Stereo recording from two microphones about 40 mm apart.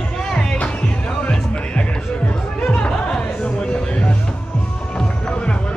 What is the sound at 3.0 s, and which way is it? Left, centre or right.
Chatter, centre.